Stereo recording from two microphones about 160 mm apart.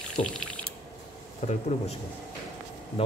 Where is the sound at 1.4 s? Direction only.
50° left (ahead or behind).